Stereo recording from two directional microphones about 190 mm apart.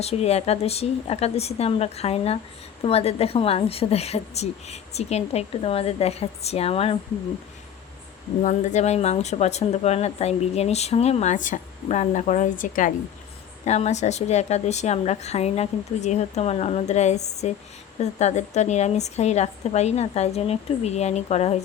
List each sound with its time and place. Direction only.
0.0 s speech: 35° left (ahead or behind)
8.4 s speech: 40° left (ahead or behind)